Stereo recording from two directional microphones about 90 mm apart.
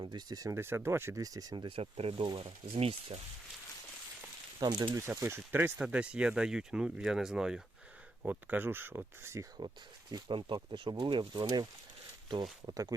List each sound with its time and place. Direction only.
0.0 s speech: 50° right (ahead or behind)
0.5 s speech: 25° right (ahead or behind)
1.2 s speech: 45° right (ahead or behind)
1.5 s speech: 70° right (ahead or behind); by 2.2 s 90° right
2.2 s speech: 65° right (ahead or behind); by 3.2 s 90° right
4.6 s speech: 45° right (ahead or behind)
4.9 s speech: 30° right (ahead or behind)
5.8 s speech: 10° right (ahead or behind)
8.2 s speech: 20° right (ahead or behind)
9.6 s speech: 55° right (ahead or behind)